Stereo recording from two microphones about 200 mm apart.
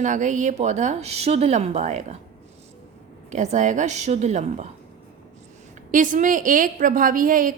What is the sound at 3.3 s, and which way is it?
A woman's voice, 35° right (ahead or behind).